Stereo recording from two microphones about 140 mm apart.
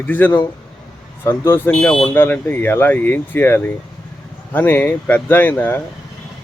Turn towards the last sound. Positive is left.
turn(degrees=15)  # may be behind; listen again after turning